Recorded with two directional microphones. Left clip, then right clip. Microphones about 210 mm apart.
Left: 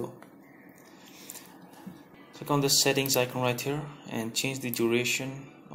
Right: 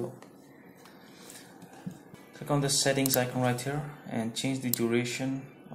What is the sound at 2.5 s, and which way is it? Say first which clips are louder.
Speech: left 3 dB; 25° left (ahead or behind).